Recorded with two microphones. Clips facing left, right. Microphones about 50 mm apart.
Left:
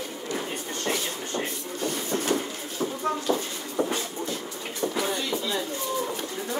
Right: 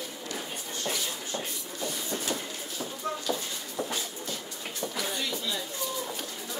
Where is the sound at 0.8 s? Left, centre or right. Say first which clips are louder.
Left 4 dB; left.